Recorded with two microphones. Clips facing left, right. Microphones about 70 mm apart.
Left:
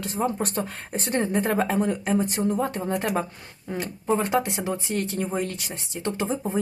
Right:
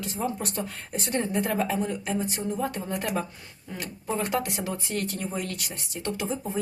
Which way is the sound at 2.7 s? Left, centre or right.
Left.